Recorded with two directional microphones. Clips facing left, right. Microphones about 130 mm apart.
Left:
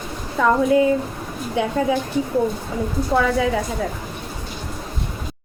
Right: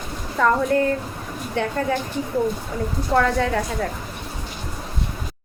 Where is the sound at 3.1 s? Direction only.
5° left (ahead or behind).